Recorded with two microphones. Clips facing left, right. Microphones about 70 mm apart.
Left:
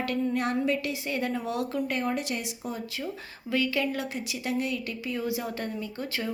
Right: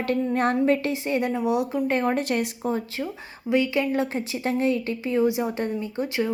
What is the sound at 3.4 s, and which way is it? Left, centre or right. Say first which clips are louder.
A woman's voice: right 5 dB; right.